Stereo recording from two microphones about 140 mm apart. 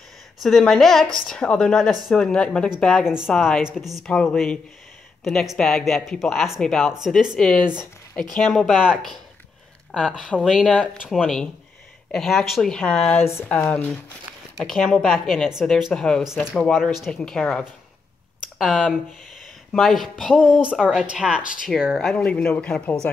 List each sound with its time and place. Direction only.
0.4 s speech: centre (ahead or behind)
13.2 s a woman's voice: 20° left (ahead or behind)